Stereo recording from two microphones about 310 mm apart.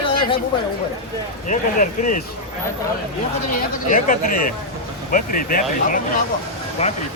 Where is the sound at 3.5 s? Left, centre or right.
Left.